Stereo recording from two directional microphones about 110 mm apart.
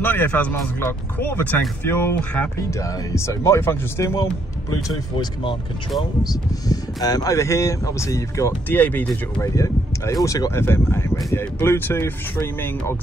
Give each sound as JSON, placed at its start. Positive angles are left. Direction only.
{"t": 0.0, "sound": "speech", "side_deg": 20}
{"t": 5.1, "sound": "speech", "side_deg": 50}
{"t": 6.7, "sound": "speech", "side_deg": 35}
{"t": 8.6, "sound": "speech", "side_deg": 15}
{"t": 9.4, "sound": "a sound", "side_deg": 25}
{"t": 10.2, "sound": "speech", "side_deg": 30}